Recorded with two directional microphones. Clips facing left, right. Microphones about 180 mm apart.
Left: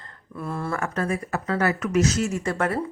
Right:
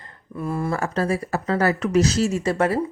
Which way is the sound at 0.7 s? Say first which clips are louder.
Right 1 dB; 30° right (ahead or behind).